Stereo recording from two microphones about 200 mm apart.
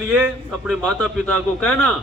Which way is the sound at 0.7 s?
Centre (ahead or behind).